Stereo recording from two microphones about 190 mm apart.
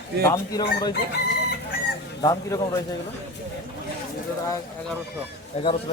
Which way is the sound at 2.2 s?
20° left (ahead or behind).